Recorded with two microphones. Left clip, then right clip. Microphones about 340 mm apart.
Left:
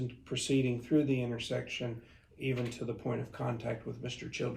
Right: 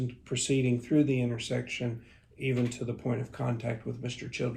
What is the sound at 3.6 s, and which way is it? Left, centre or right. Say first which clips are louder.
Speech: right 2 dB; right.